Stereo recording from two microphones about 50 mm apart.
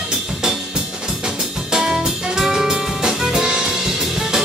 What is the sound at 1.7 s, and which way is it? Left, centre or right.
Jazz, centre.